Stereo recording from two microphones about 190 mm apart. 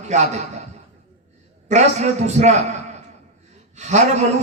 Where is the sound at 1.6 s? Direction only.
35° right (ahead or behind).